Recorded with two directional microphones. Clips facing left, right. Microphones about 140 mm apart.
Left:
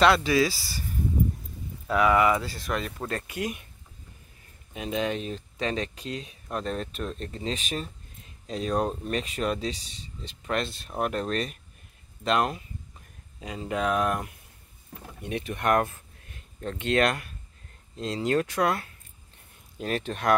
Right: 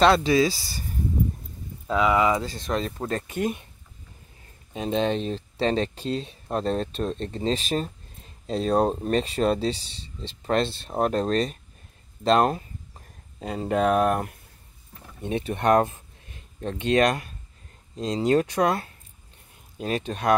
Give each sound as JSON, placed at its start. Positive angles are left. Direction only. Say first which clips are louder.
{"t": 0.0, "sound": "speech", "louder": "right 2 dB", "side_deg": -30}
{"t": 1.9, "sound": "speech", "louder": "even", "side_deg": -20}
{"t": 4.7, "sound": "speech", "louder": "right 4 dB", "side_deg": -30}
{"t": 15.2, "sound": "speech", "louder": "right 4 dB", "side_deg": -25}